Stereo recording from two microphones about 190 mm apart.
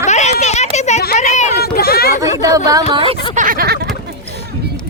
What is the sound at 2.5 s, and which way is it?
Speech, 20° right (ahead or behind).